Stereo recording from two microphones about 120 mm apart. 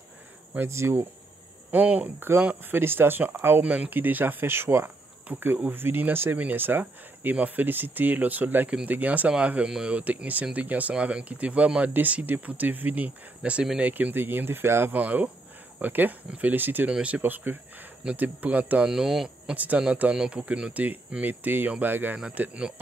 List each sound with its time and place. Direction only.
0.6 s speech: 20° right (ahead or behind)